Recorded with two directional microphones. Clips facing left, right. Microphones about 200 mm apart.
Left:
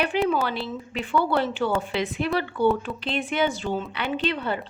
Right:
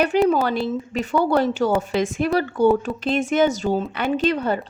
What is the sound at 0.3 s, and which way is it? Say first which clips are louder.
Speech: right 6 dB; 45° right (ahead or behind).